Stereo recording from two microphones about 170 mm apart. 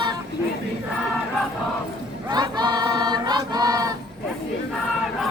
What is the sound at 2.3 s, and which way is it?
Choir, 25° right (ahead or behind).